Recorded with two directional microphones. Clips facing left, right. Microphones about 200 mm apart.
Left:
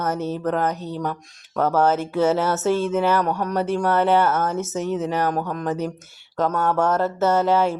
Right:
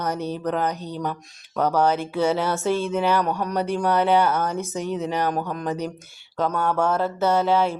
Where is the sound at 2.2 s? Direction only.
5° left (ahead or behind).